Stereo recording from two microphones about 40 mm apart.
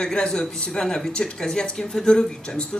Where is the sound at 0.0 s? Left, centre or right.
Left.